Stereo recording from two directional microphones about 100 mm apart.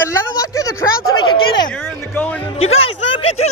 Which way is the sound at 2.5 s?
90° left.